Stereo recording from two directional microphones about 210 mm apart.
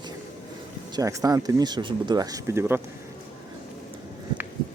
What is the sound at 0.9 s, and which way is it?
Speech, 15° right (ahead or behind).